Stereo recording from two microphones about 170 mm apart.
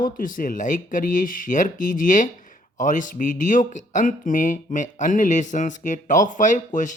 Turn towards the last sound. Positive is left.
turn(degrees=50)  # may be behind; listen again after turning